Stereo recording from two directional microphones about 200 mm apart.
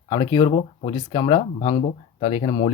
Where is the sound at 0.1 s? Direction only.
20° left (ahead or behind).